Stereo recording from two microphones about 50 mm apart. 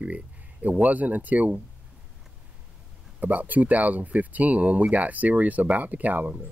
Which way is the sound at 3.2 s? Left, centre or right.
Right.